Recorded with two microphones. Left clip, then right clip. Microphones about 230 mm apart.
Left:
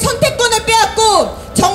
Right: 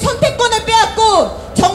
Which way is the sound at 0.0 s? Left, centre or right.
Left.